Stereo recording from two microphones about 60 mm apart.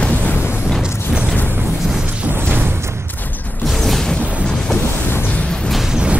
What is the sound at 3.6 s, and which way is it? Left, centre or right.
Music, centre.